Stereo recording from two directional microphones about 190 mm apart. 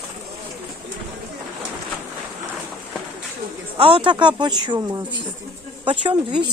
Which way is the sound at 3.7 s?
30° right (ahead or behind).